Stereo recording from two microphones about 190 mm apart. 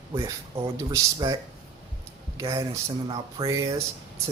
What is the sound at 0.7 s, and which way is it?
Speech, 20° right (ahead or behind).